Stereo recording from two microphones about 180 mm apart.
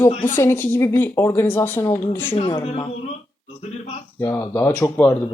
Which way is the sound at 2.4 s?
30° left (ahead or behind).